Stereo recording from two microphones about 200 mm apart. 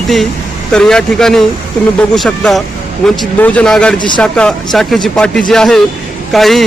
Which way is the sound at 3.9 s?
25° left (ahead or behind).